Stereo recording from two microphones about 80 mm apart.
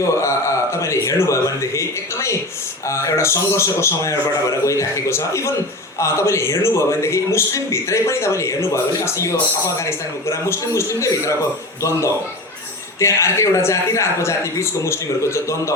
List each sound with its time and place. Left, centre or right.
0.0 s a man's voice: left